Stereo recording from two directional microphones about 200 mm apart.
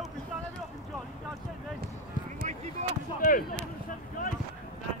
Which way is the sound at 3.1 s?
45° left (ahead or behind).